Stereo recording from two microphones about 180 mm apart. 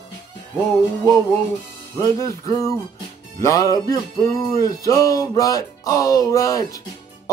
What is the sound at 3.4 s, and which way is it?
Music, 20° left (ahead or behind).